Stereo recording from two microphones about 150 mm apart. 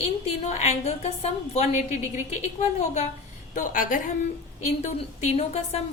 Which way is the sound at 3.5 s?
65° left (ahead or behind).